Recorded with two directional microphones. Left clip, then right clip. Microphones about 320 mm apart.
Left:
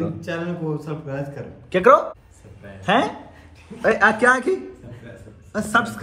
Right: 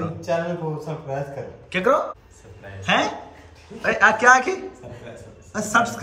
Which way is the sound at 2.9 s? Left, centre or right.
Centre.